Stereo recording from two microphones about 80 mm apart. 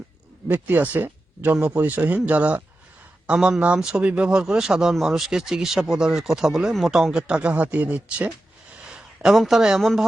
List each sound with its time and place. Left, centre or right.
0.4 s a man's voice: right; by 10.0 s centre